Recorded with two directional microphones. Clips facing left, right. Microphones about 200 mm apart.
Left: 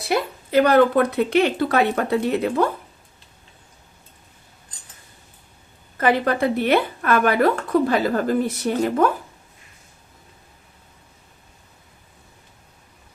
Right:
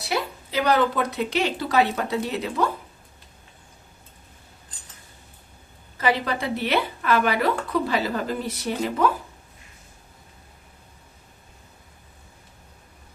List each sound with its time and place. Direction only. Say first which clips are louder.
0.5 s speech: left 7 dB; 55° left (ahead or behind)
6.0 s speech: left 5 dB; 55° left (ahead or behind)